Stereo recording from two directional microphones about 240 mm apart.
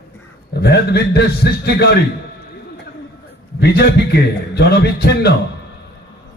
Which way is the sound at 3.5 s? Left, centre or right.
Left.